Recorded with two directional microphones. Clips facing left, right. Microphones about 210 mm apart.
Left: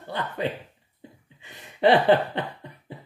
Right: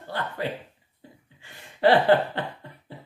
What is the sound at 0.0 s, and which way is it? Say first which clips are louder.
Speech: left 2 dB; 20° left (ahead or behind).